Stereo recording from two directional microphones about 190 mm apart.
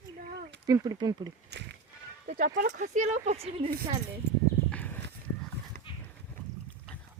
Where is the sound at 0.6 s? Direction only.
20° right (ahead or behind).